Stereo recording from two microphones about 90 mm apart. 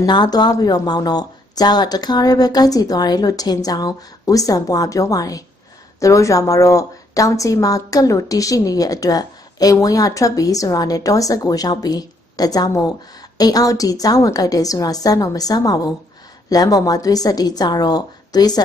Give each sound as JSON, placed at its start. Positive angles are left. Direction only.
{"t": 0.0, "sound": "a woman's voice", "side_deg": 50}